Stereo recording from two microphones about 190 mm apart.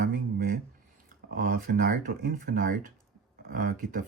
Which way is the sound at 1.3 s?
45° right (ahead or behind).